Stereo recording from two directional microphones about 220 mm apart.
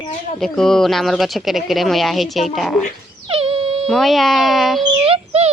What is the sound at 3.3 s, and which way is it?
Dog, 25° right (ahead or behind).